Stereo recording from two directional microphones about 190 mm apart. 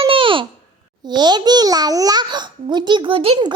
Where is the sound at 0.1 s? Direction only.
25° right (ahead or behind).